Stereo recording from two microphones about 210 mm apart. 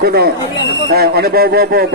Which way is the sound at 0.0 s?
50° right (ahead or behind).